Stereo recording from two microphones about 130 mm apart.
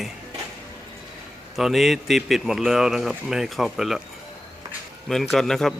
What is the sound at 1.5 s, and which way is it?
Speech, centre (ahead or behind).